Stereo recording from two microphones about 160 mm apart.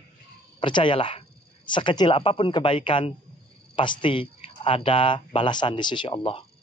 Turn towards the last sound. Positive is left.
turn(degrees=30)  # may be behind; listen again after turning